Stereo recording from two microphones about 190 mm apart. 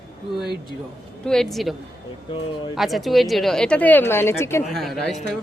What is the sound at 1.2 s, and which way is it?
Speech, centre (ahead or behind).